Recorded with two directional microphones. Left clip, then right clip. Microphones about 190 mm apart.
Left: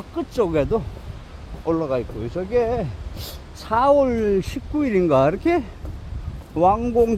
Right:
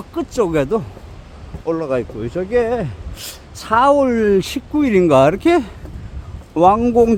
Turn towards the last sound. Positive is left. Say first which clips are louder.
# right 5 dB
turn(degrees=-35)  # may be behind; listen again after turning